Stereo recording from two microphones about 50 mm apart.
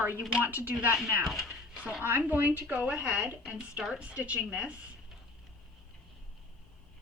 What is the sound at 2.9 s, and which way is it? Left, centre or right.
A woman's voice, right.